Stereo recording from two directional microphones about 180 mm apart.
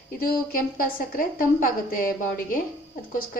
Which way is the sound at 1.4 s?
50° left (ahead or behind).